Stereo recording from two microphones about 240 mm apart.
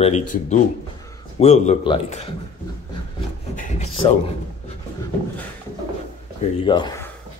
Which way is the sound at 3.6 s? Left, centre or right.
Left.